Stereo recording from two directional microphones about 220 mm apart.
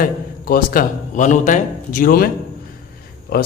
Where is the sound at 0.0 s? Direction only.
40° left (ahead or behind).